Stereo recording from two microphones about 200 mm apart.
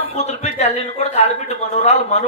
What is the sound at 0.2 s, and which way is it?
A man's voice, 35° left (ahead or behind).